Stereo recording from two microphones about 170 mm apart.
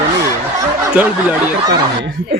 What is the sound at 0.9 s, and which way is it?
Speech, 10° right (ahead or behind).